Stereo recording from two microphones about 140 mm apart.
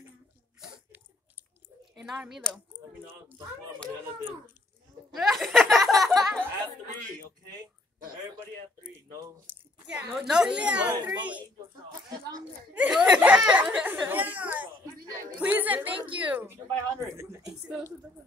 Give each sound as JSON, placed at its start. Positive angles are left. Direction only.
{"t": 2.0, "sound": "speech", "side_deg": -5}
{"t": 5.2, "sound": "laughter", "side_deg": 0}
{"t": 9.5, "sound": "a child's voice", "side_deg": -10}
{"t": 12.7, "sound": "a sound", "side_deg": -10}
{"t": 15.3, "sound": "chatter", "side_deg": -10}
{"t": 16.2, "sound": "a woman's voice", "side_deg": -15}